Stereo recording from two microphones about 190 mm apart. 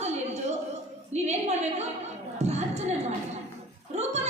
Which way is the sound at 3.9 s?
35° right (ahead or behind).